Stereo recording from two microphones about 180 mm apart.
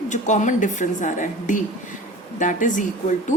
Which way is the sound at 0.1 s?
40° left (ahead or behind).